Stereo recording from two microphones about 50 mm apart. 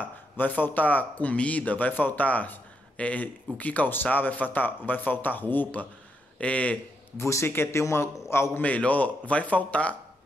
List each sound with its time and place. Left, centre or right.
0.0 s a man's voice: left
6.3 s speech: left
7.2 s a man's voice: left
7.4 s speech: left
8.5 s a man's voice: left